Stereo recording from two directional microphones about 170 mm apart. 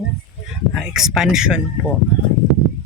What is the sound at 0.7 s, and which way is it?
Speech, centre (ahead or behind).